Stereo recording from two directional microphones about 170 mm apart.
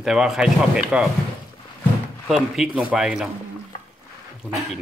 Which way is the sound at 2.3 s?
5° right (ahead or behind).